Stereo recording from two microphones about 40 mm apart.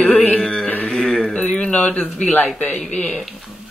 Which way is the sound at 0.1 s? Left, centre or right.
Left.